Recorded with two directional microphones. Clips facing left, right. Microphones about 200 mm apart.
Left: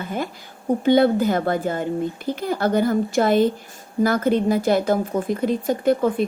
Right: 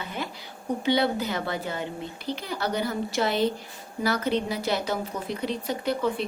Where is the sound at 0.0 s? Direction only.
50° left (ahead or behind).